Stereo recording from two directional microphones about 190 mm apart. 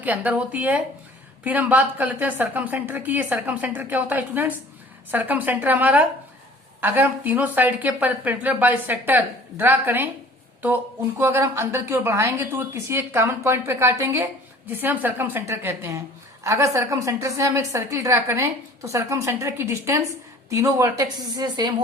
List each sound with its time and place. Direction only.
0.0 s a woman's voice: 10° right (ahead or behind)
11.2 s a woman's voice: 10° right (ahead or behind)